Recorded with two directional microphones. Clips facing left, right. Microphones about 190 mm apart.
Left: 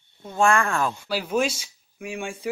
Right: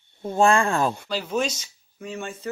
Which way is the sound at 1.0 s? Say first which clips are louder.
Left 2 dB; 10° left (ahead or behind).